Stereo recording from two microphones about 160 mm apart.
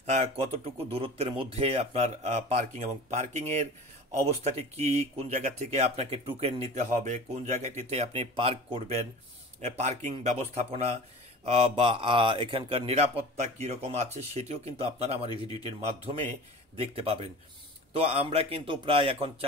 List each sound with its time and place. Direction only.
0.0 s speech: 45° right (ahead or behind)